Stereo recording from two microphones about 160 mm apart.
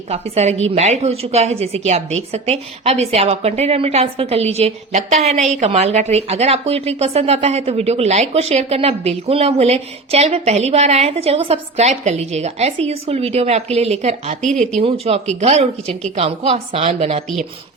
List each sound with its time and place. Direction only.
0.1 s a woman's voice: 40° right (ahead or behind)
14.4 s speech: 5° left (ahead or behind)
14.8 s a woman's voice: 35° right (ahead or behind)